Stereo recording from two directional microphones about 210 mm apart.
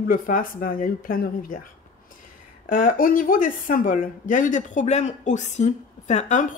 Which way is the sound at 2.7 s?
40° left (ahead or behind).